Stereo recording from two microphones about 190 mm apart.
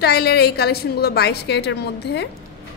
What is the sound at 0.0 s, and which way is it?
A woman's voice, 55° left (ahead or behind).